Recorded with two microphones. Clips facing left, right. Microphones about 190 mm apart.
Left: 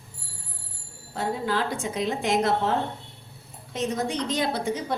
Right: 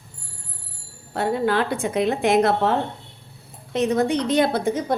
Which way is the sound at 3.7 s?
65° right (ahead or behind).